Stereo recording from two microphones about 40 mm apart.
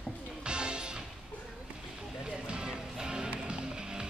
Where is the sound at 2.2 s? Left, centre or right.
Right.